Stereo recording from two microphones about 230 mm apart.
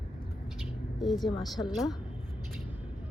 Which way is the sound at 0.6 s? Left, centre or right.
Centre.